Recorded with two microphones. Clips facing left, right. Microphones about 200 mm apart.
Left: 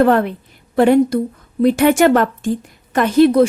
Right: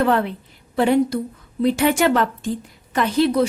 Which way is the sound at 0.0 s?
50° left (ahead or behind).